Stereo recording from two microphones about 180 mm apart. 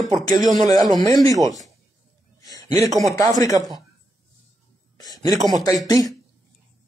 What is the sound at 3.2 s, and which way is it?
Speech, 20° left (ahead or behind).